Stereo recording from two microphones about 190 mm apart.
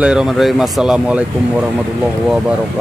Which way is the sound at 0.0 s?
5° right (ahead or behind).